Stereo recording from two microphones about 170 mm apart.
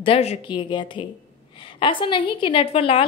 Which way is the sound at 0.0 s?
35° left (ahead or behind).